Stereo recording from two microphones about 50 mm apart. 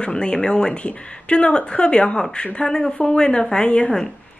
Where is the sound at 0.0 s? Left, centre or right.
Centre.